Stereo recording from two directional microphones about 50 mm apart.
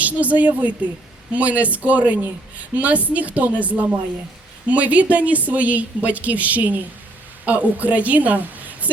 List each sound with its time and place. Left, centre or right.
0.0 s a woman's voice: right